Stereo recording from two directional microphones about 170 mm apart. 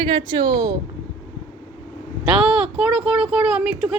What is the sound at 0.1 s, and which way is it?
Speech, 25° right (ahead or behind).